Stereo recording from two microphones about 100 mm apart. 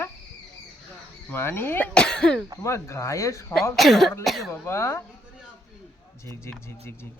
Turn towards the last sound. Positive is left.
turn(degrees=25)  # may be behind; listen again after turning